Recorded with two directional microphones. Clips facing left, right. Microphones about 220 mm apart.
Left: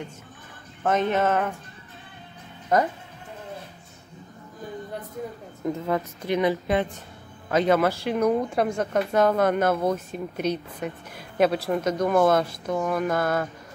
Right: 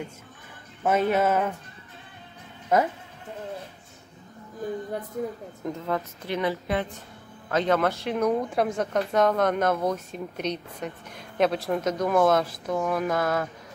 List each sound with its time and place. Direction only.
0.8 s speech: 10° right (ahead or behind)
2.7 s speech: 5° right (ahead or behind)
5.7 s a woman's voice: 15° left (ahead or behind)